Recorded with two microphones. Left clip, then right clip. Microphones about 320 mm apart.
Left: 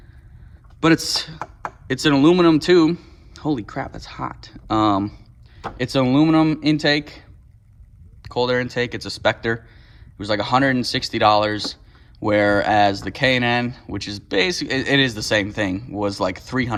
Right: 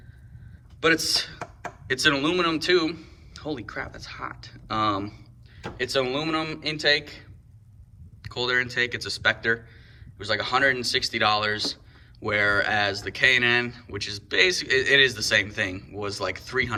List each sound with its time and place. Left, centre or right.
0.8 s speech: centre